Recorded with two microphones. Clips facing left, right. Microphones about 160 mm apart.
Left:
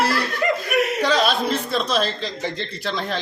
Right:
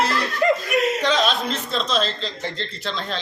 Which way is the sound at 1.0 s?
10° left (ahead or behind).